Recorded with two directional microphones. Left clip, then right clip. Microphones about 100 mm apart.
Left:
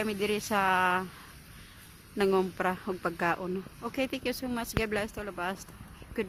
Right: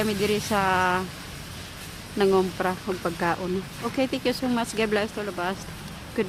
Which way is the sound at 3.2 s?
75° left (ahead or behind).